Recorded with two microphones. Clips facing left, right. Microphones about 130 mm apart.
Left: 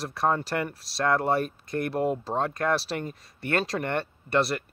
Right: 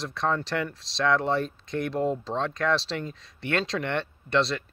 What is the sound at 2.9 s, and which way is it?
Speech, 50° left (ahead or behind).